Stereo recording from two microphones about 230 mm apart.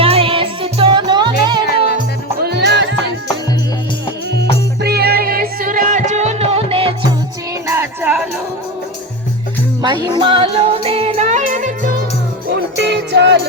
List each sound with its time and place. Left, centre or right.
0.0 s music: right
2.4 s music: right
4.8 s music: right
7.7 s music: centre
9.8 s music: centre; by 11.9 s right
12.7 s music: right